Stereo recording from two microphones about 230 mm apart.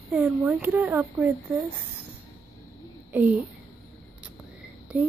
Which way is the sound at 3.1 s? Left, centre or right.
Centre.